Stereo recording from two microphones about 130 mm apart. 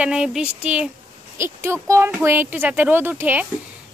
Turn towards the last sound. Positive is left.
turn(degrees=-15)  # may be behind; listen again after turning